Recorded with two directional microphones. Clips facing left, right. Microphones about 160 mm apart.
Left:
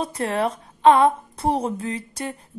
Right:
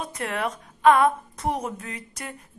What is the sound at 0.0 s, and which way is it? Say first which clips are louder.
A woman's voice: left 5 dB; 30° left (ahead or behind).